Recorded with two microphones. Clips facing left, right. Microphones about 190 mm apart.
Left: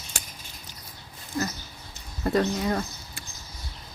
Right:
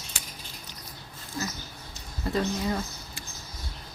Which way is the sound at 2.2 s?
55° left (ahead or behind).